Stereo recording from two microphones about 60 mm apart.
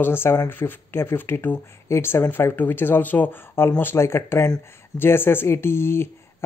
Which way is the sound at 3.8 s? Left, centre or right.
Left.